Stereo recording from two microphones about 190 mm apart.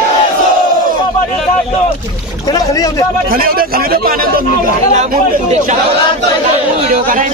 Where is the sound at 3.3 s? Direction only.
50° right (ahead or behind).